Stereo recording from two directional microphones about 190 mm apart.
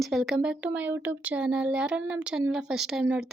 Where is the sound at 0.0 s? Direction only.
Centre (ahead or behind).